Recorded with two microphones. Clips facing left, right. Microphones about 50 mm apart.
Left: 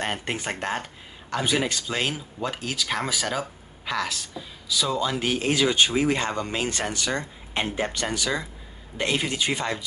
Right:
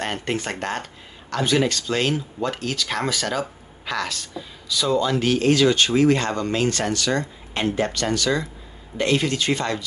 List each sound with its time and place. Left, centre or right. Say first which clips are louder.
0.0 s speech: right 3 dB; centre